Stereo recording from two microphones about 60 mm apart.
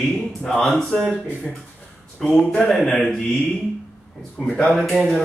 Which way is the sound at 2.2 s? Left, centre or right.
Centre.